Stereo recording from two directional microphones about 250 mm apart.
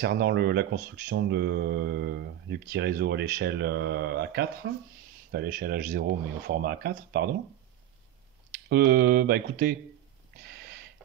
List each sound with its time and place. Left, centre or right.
0.0 s speech: right
8.6 s speech: right
10.4 s a sound: right